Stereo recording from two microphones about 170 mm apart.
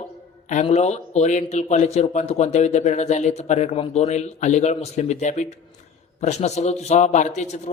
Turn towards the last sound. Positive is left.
turn(degrees=40)  # may be behind; listen again after turning